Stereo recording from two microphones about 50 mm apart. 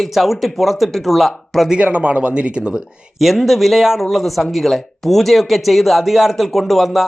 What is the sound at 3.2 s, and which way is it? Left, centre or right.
Speech, centre.